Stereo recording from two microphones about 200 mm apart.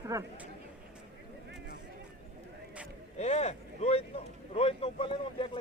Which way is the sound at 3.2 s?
30° left (ahead or behind).